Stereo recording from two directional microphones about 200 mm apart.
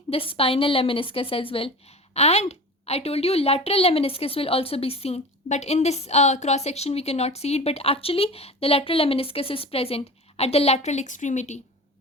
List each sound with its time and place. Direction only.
0.1 s a woman's voice: 30° left (ahead or behind)